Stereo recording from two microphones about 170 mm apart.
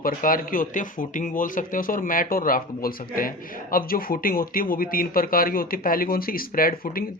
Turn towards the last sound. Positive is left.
turn(degrees=60)  # may be behind; listen again after turning